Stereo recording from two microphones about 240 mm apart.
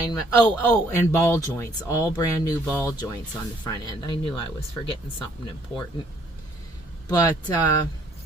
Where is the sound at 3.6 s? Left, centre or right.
Centre.